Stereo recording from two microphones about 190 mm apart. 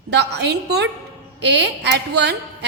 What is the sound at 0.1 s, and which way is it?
A woman's voice, 60° right (ahead or behind).